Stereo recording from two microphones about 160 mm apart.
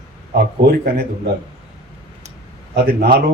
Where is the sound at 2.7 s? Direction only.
75° right (ahead or behind).